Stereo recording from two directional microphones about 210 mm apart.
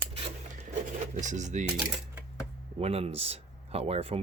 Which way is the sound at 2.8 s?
30° right (ahead or behind).